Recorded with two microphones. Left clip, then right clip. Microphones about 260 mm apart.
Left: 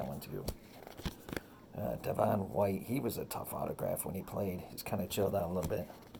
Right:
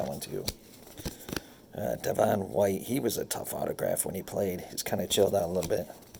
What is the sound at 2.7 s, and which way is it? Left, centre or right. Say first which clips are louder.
Speech: right 7 dB; right.